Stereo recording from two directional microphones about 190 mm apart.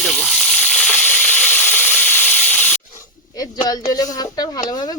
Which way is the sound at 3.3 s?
20° left (ahead or behind).